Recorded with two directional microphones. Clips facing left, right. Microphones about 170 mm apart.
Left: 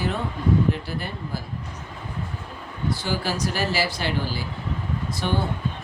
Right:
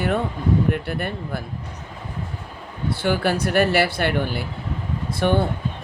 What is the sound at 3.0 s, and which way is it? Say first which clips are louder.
Speech: right 9 dB; 60° right (ahead or behind).